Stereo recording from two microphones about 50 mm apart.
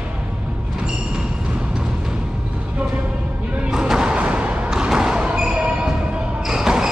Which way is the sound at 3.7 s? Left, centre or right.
Centre.